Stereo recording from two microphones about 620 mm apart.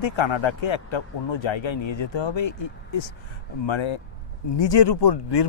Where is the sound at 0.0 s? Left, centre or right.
Left.